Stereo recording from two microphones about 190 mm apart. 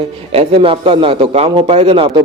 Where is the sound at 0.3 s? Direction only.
30° right (ahead or behind).